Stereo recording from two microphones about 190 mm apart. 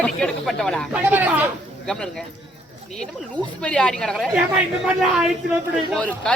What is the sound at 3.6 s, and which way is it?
Speech, 5° left (ahead or behind).